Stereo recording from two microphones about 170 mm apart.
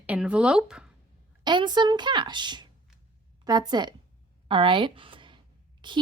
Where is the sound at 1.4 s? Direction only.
25° right (ahead or behind).